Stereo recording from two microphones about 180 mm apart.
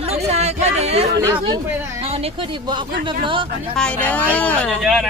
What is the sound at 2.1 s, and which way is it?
Speech, 35° right (ahead or behind).